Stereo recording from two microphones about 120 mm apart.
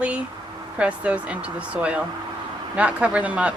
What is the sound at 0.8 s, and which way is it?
Speech, 10° right (ahead or behind).